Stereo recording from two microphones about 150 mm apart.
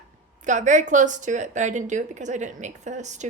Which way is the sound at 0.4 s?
55° right (ahead or behind).